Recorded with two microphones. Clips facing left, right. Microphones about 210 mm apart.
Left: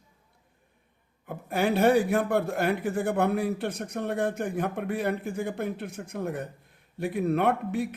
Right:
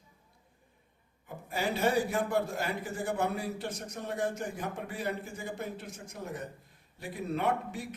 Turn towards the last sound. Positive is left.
turn(degrees=60)  # may be behind; listen again after turning